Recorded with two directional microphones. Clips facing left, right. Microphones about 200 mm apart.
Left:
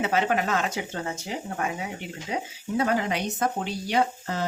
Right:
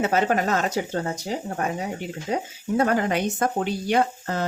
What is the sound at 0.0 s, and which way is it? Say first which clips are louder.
Speech: right 3 dB; 45° right (ahead or behind).